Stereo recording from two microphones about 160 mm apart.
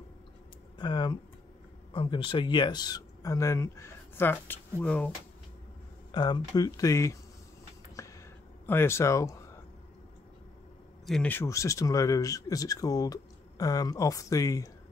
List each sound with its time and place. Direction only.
0.7 s speech: 25° left (ahead or behind); by 5.1 s 10° left (ahead or behind)
6.1 s speech: 25° left (ahead or behind)
8.0 s a sound: 20° left (ahead or behind)
8.6 s speech: 15° left (ahead or behind)
11.1 s speech: 5° left (ahead or behind)